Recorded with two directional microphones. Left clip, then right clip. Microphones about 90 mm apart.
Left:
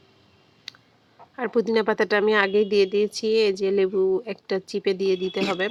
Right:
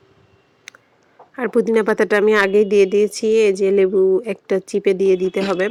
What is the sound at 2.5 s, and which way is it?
Speech, 50° right (ahead or behind).